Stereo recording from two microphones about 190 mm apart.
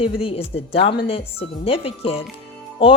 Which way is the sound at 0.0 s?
30° left (ahead or behind).